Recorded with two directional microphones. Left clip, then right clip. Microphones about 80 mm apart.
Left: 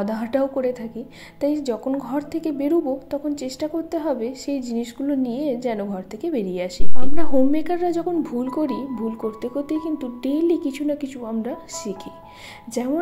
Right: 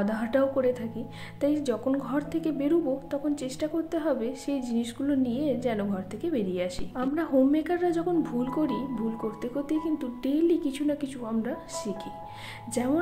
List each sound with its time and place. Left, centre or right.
0.0 s a woman's voice: left